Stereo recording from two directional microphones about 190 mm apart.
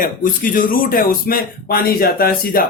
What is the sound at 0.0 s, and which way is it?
Speech, 45° left (ahead or behind).